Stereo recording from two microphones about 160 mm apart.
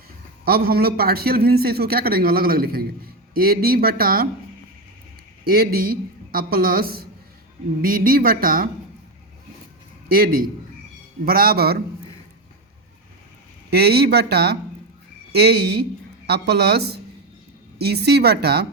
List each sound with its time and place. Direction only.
0.4 s a man's voice: 70° right (ahead or behind)
5.5 s a man's voice: 65° right (ahead or behind)
10.1 s a woman's voice: 65° right (ahead or behind)
13.7 s speech: 90° right